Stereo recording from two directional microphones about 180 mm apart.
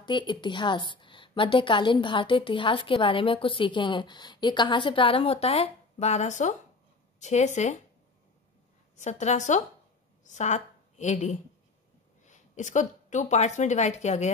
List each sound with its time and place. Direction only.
0.0 s a woman's voice: 25° left (ahead or behind); by 7.8 s 40° left (ahead or behind)
8.9 s a woman's voice: 40° left (ahead or behind)